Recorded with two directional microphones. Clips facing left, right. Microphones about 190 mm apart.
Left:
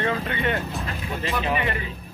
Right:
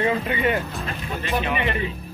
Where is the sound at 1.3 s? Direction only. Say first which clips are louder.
Right 2 dB; 25° right (ahead or behind).